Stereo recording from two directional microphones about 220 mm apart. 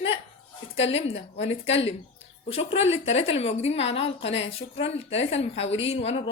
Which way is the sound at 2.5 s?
25° left (ahead or behind).